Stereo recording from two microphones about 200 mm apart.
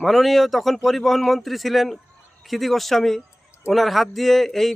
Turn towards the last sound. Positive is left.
turn(degrees=0)  # may be behind; listen again after turning